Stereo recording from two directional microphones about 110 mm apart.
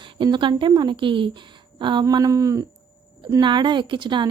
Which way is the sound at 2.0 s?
30° right (ahead or behind).